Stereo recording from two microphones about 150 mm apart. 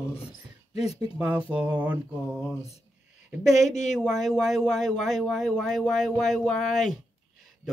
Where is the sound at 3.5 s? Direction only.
50° left (ahead or behind).